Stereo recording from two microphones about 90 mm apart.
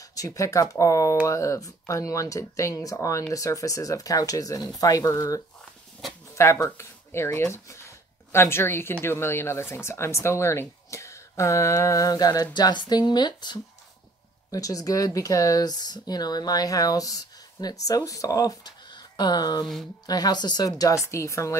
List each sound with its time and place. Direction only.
0.1 s speech: 40° left (ahead or behind)
14.5 s speech: 40° left (ahead or behind)
19.6 s speech: 5° left (ahead or behind)
20.1 s speech: 50° left (ahead or behind)